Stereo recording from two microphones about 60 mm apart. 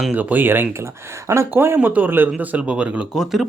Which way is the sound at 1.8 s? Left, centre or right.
Right.